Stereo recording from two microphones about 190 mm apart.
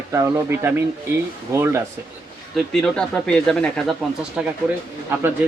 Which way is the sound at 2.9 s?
5° left (ahead or behind).